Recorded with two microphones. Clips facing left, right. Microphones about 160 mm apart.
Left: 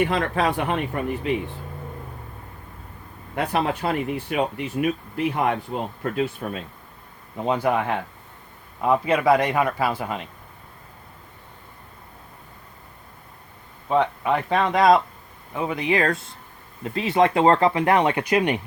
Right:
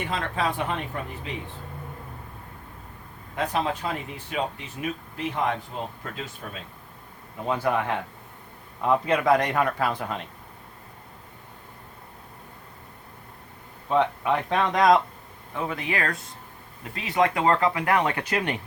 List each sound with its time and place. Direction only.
0.0 s speech: 65° left (ahead or behind)
3.3 s speech: 65° left (ahead or behind)
7.4 s a man's voice: 15° left (ahead or behind)
13.8 s a man's voice: 5° left (ahead or behind)